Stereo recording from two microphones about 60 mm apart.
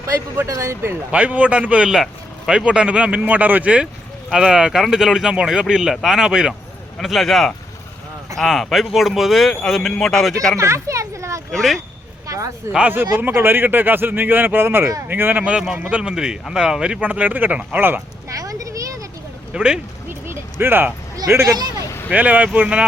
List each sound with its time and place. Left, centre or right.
0.4 s speech: right
1.1 s a man's voice: right; by 10.3 s centre
10.6 s a sound: right
11.5 s a man's voice: centre
12.3 s speech: right
12.9 s speech: right
15.4 s speech: centre
17.0 s speech: right
18.3 s children playing: right
19.5 s speech: centre
20.1 s a sound: right
21.2 s speech: right
22.1 s speech: right